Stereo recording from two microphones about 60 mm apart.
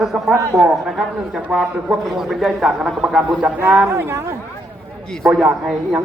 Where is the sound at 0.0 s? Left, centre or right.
Centre.